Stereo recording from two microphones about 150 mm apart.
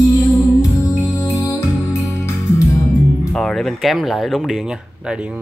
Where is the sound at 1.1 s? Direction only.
20° left (ahead or behind).